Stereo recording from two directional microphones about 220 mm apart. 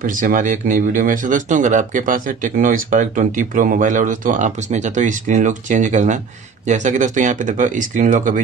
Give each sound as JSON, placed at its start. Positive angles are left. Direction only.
{"t": 0.0, "sound": "speech", "side_deg": -35}